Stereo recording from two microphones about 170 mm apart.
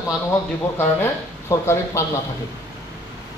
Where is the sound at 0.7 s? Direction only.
15° left (ahead or behind).